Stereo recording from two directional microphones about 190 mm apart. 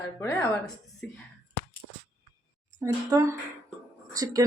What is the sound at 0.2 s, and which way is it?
Speech, 15° left (ahead or behind).